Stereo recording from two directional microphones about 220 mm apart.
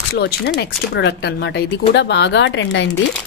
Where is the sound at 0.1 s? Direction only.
50° left (ahead or behind).